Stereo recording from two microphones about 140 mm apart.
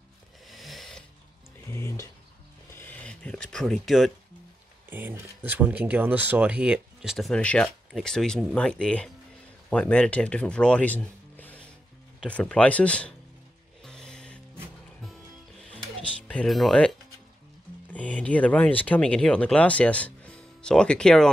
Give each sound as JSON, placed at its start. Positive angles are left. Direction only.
{"t": 0.5, "sound": "sewing machine", "side_deg": 0}
{"t": 1.7, "sound": "speech", "side_deg": 20}
{"t": 4.8, "sound": "speech", "side_deg": -15}
{"t": 13.8, "sound": "music", "side_deg": 5}
{"t": 17.9, "sound": "speech", "side_deg": 10}